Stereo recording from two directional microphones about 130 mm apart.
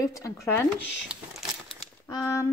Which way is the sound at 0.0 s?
20° left (ahead or behind).